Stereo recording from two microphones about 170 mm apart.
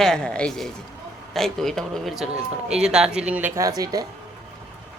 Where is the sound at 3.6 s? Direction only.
20° right (ahead or behind).